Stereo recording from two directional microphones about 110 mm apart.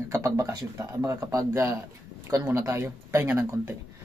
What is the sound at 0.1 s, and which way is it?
Speech, 30° right (ahead or behind).